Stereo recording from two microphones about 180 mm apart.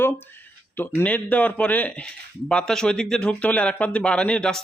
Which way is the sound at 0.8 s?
10° left (ahead or behind).